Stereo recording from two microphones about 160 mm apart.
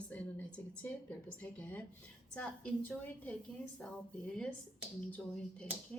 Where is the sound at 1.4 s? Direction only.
10° left (ahead or behind).